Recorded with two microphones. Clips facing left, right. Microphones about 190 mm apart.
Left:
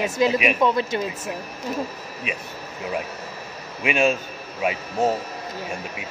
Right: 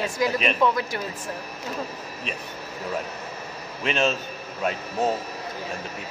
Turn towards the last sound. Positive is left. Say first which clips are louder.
# left 2 dB
turn(degrees=10)  # may be behind; listen again after turning